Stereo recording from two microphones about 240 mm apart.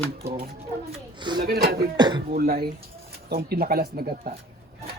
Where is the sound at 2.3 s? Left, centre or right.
Right.